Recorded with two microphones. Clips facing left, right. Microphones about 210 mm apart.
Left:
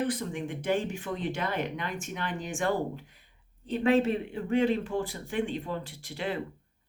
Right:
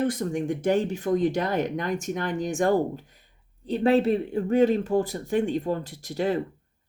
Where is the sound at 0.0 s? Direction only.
45° right (ahead or behind).